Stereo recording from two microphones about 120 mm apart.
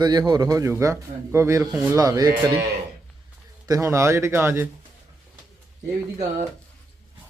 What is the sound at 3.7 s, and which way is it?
Speech, 25° right (ahead or behind).